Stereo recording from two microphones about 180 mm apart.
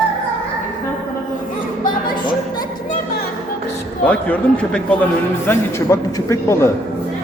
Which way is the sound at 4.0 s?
5° left (ahead or behind).